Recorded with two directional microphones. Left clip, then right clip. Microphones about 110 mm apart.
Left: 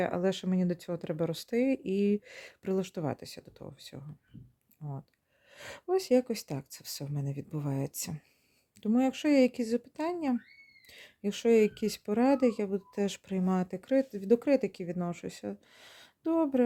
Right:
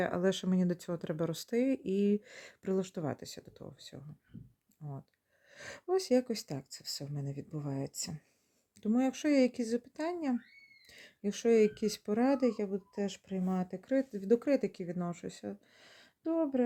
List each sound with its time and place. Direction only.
0.0 s speech: 5° left (ahead or behind); by 8.2 s 35° left (ahead or behind)
8.8 s speech: 20° left (ahead or behind); by 13.8 s 45° left (ahead or behind)
13.8 s speech: 30° left (ahead or behind)